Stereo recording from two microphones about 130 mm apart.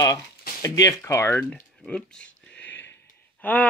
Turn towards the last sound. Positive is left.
turn(degrees=15)  # may be behind; listen again after turning